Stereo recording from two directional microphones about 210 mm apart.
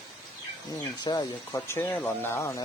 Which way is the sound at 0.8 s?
15° left (ahead or behind).